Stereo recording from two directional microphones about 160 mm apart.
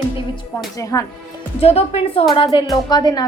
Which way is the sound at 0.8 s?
20° left (ahead or behind).